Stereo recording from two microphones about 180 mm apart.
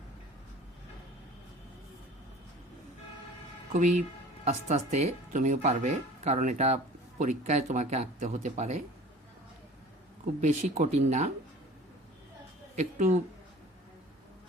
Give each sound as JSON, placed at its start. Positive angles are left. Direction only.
{"t": 3.7, "sound": "speech", "side_deg": -40}
{"t": 10.4, "sound": "speech", "side_deg": -40}
{"t": 12.7, "sound": "speech", "side_deg": -40}